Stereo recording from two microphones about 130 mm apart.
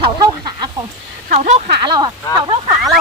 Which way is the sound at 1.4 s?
60° right (ahead or behind).